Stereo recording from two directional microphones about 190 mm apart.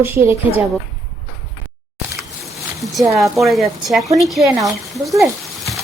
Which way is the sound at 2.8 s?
Centre (ahead or behind).